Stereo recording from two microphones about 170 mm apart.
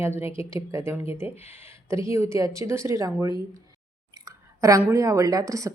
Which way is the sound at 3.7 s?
20° right (ahead or behind).